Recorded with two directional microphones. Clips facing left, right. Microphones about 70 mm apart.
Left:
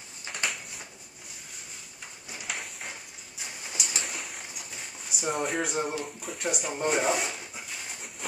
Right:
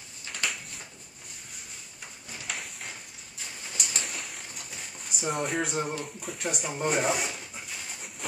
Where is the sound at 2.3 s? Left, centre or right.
Centre.